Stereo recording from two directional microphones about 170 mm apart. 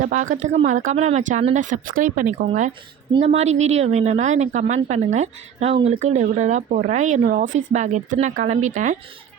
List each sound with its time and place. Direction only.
0.0 s speech: 50° right (ahead or behind)